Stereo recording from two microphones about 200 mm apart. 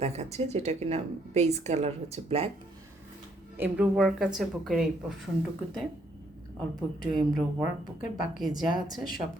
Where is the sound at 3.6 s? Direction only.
5° right (ahead or behind).